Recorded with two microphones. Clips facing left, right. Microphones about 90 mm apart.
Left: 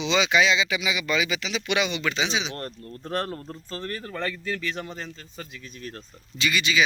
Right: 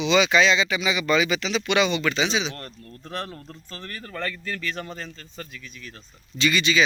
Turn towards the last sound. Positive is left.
turn(degrees=10)  # may be behind; listen again after turning